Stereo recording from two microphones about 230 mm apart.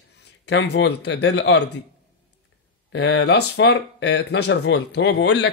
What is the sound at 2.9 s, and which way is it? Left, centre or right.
Speech, left.